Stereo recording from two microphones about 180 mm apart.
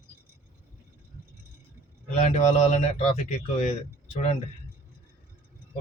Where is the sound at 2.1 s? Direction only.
35° left (ahead or behind).